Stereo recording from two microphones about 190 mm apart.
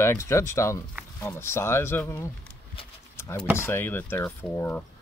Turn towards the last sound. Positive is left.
turn(degrees=10)  # may be behind; listen again after turning